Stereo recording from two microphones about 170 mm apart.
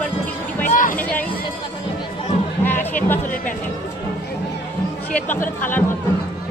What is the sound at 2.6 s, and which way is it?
Music, 10° left (ahead or behind).